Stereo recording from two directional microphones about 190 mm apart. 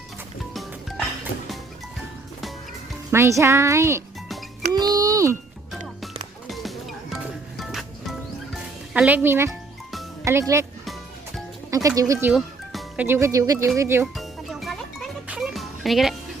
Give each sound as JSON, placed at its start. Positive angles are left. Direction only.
{"t": 0.5, "sound": "music", "side_deg": 0}
{"t": 3.1, "sound": "speech", "side_deg": -15}
{"t": 4.7, "sound": "music", "side_deg": -20}
{"t": 6.5, "sound": "music", "side_deg": 0}
{"t": 8.9, "sound": "speech", "side_deg": -5}
{"t": 9.5, "sound": "music", "side_deg": 0}
{"t": 10.2, "sound": "speech", "side_deg": -15}
{"t": 11.7, "sound": "speech", "side_deg": -20}
{"t": 14.2, "sound": "music", "side_deg": 0}